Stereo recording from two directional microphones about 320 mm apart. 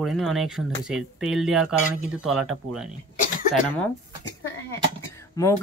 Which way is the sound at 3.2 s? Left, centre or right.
Left.